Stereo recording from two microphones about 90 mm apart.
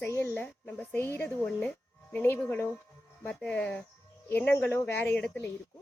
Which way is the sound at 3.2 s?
15° left (ahead or behind).